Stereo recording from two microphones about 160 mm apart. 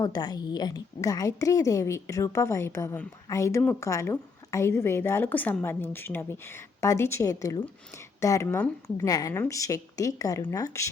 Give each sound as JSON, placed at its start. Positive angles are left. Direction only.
{"t": 0.0, "sound": "a woman's voice", "side_deg": 25}